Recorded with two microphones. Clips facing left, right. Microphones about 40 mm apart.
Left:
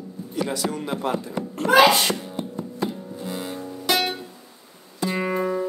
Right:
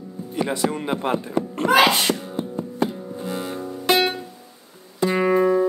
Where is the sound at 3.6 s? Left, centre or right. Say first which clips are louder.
Right 4 dB; right.